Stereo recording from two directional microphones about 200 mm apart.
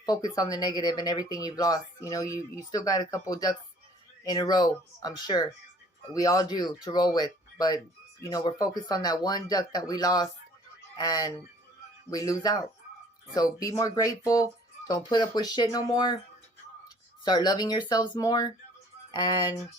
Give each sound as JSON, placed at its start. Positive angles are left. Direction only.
{"t": 0.0, "sound": "speech", "side_deg": 20}
{"t": 17.2, "sound": "speech", "side_deg": 20}